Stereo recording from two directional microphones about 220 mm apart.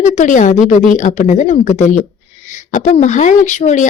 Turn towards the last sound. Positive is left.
turn(degrees=35)  # may be behind; listen again after turning